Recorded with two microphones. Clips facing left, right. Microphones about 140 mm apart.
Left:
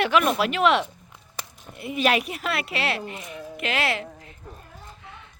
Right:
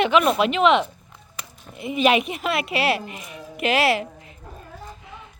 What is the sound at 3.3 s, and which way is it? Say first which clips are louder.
Speech: right 7 dB; 15° right (ahead or behind).